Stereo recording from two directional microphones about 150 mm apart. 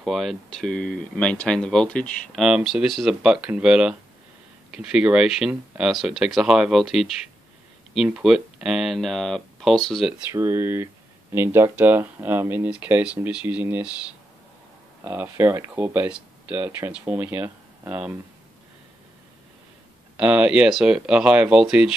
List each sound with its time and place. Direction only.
0.0 s speech: centre (ahead or behind)
2.4 s speech: 5° right (ahead or behind)
10.3 s speech: 15° right (ahead or behind)
15.0 s speech: 15° right (ahead or behind)
20.2 s speech: 5° right (ahead or behind)